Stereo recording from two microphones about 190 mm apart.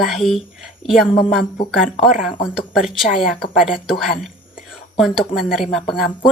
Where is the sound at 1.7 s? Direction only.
Centre (ahead or behind).